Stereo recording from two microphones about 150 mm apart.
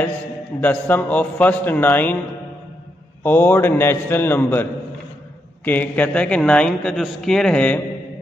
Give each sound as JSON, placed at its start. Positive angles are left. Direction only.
{"t": 0.6, "sound": "a man's voice", "side_deg": 10}
{"t": 3.3, "sound": "a man's voice", "side_deg": 15}
{"t": 5.7, "sound": "a man's voice", "side_deg": 10}